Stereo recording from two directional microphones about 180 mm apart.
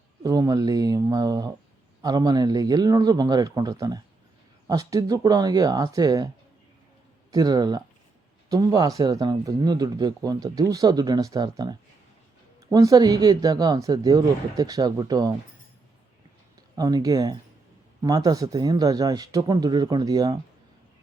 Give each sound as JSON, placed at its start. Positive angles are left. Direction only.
{"t": 0.2, "sound": "speech", "side_deg": -20}
{"t": 7.3, "sound": "speech", "side_deg": -20}
{"t": 16.7, "sound": "speech", "side_deg": -20}